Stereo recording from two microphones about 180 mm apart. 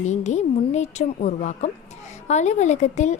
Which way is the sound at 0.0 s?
40° left (ahead or behind).